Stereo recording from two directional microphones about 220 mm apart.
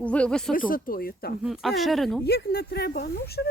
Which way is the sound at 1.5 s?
Centre (ahead or behind).